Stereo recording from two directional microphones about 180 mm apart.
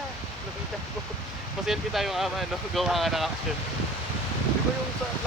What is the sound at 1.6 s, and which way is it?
Speech, centre (ahead or behind).